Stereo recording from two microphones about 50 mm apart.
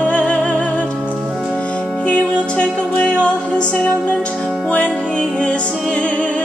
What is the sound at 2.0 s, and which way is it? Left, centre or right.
Music, left.